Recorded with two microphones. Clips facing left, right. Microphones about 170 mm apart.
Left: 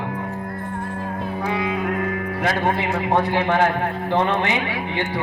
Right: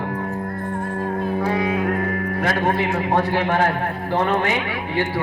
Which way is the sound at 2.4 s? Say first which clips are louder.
Right 1 dB; 20° left (ahead or behind).